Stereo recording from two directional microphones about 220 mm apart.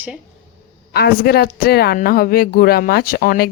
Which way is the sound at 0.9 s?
45° left (ahead or behind).